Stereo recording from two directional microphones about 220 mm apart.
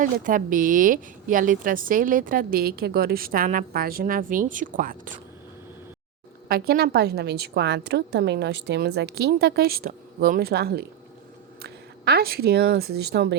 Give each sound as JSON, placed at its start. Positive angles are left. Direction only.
{"t": 0.0, "sound": "a woman's voice", "side_deg": -35}
{"t": 6.5, "sound": "a woman's voice", "side_deg": -45}